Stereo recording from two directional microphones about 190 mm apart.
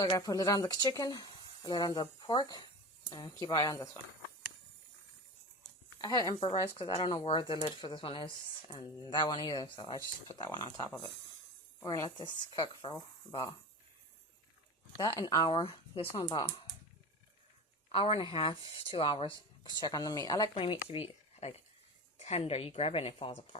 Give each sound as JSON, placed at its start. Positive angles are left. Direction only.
{"t": 0.0, "sound": "speech", "side_deg": 20}
{"t": 6.0, "sound": "speech", "side_deg": 20}
{"t": 6.4, "sound": "a woman's voice", "side_deg": 30}
{"t": 15.2, "sound": "speech", "side_deg": 20}
{"t": 17.9, "sound": "a woman's voice", "side_deg": 30}